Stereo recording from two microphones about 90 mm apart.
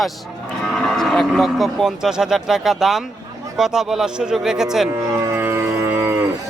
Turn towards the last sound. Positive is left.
turn(degrees=-25)  # may be behind; listen again after turning